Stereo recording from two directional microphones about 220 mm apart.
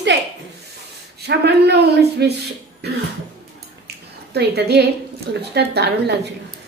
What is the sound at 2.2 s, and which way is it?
Speech, 50° right (ahead or behind).